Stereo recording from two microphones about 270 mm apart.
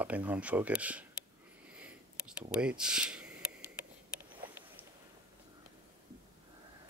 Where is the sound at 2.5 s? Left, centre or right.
Centre.